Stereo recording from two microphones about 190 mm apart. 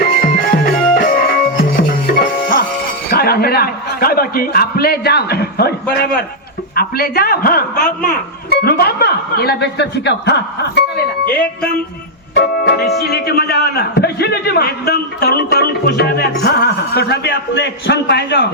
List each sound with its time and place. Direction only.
0.0 s music: 55° left (ahead or behind)
3.1 s a man's voice: 55° left (ahead or behind)
6.7 s a man's voice: 50° left (ahead or behind)
12.3 s a man's voice: 60° left (ahead or behind)